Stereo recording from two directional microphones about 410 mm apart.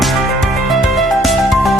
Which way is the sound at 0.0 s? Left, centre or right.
Centre.